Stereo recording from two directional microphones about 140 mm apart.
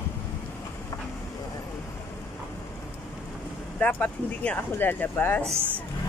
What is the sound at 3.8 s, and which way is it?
Speech, 10° left (ahead or behind).